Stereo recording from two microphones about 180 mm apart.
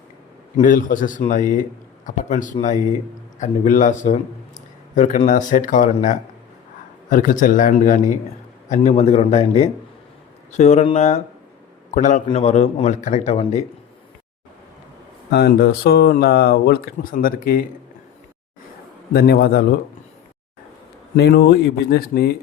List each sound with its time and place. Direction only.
0.5 s a man's voice: 45° left (ahead or behind)
15.3 s speech: 60° left (ahead or behind)
19.1 s speech: 60° left (ahead or behind)
21.2 s speech: 65° left (ahead or behind)